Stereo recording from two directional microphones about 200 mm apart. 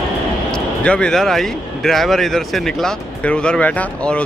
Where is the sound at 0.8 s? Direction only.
5° left (ahead or behind).